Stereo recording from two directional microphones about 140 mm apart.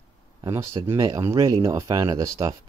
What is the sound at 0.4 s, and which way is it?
Speech, 20° right (ahead or behind).